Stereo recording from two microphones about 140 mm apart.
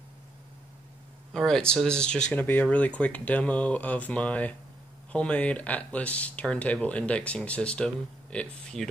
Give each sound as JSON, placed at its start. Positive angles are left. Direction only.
{"t": 1.3, "sound": "speech", "side_deg": 5}